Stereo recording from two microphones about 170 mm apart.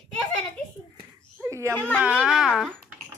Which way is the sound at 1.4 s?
15° right (ahead or behind).